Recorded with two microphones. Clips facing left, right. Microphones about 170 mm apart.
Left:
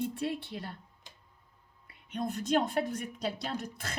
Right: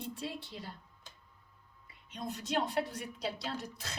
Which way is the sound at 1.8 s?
55° left (ahead or behind).